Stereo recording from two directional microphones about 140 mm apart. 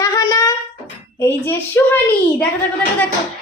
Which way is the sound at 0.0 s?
20° left (ahead or behind).